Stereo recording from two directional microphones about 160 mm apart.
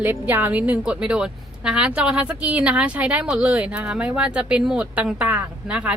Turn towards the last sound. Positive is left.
turn(degrees=-10)  # may be behind; listen again after turning